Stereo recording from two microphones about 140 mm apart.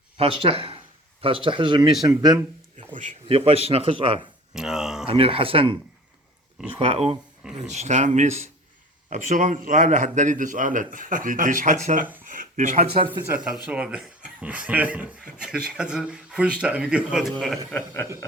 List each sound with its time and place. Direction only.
0.2 s speech: 45° right (ahead or behind); by 2.4 s 25° right (ahead or behind)
3.2 s speech: 40° right (ahead or behind)
4.5 s speech: 5° right (ahead or behind)
5.1 s speech: 40° right (ahead or behind)
6.7 s speech: 45° right (ahead or behind)
7.4 s speech: 5° right (ahead or behind)
7.7 s a man's voice: 55° right (ahead or behind)
13.2 s speech: 10° right (ahead or behind)
17.7 s speech: 15° left (ahead or behind)